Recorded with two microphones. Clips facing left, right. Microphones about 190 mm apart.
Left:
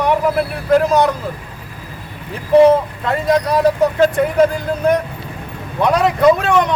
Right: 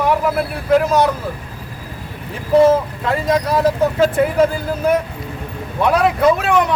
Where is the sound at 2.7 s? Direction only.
Centre (ahead or behind).